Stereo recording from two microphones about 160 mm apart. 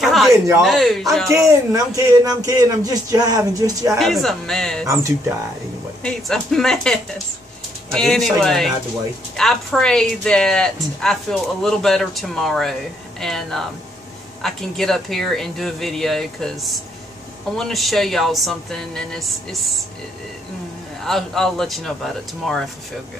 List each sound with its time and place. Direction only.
0.0 s a sound: centre (ahead or behind)
0.6 s speech: centre (ahead or behind)
1.3 s speech: 20° right (ahead or behind)
4.0 s speech: centre (ahead or behind)
6.0 s speech: 5° left (ahead or behind)
21.0 s speech: 5° left (ahead or behind)